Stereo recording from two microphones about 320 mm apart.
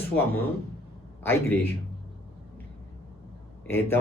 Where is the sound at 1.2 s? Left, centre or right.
Centre.